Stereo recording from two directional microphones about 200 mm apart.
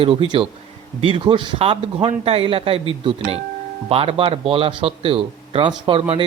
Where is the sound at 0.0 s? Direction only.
25° right (ahead or behind).